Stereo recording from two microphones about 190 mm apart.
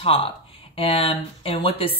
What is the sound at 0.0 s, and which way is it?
Speech, 30° left (ahead or behind).